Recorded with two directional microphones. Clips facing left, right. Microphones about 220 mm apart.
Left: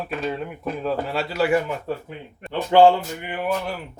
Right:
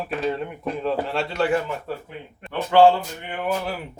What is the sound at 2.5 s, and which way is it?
Speech, 20° left (ahead or behind).